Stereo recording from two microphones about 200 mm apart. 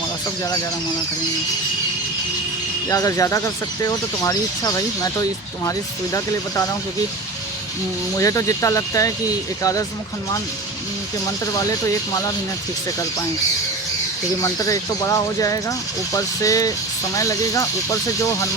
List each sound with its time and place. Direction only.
2.9 s speech: 15° left (ahead or behind)
8.2 s speech: 15° left (ahead or behind)
14.4 s speech: 15° left (ahead or behind)